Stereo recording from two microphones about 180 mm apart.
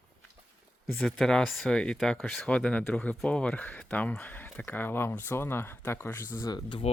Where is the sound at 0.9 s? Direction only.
Centre (ahead or behind).